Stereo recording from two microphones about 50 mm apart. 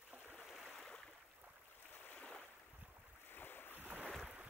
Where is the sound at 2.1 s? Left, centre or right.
Centre.